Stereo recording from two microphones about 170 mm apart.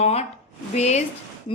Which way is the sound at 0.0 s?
40° left (ahead or behind).